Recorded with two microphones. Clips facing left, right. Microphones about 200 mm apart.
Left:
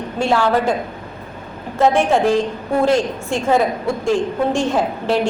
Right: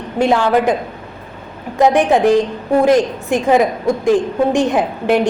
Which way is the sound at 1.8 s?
15° right (ahead or behind).